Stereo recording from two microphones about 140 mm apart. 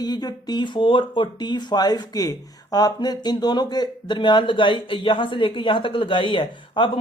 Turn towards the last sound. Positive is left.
turn(degrees=35)  # may be behind; listen again after turning